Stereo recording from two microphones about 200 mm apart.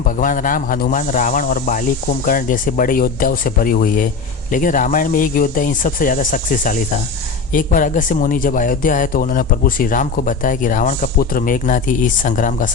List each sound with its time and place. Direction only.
0.0 s a man's voice: 40° left (ahead or behind)